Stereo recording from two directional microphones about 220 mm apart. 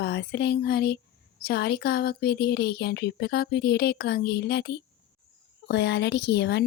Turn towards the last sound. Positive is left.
turn(degrees=50)  # may be behind; listen again after turning